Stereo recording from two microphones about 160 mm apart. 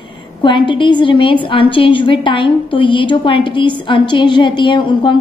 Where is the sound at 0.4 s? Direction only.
30° left (ahead or behind).